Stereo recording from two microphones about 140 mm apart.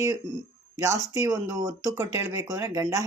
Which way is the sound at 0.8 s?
25° right (ahead or behind).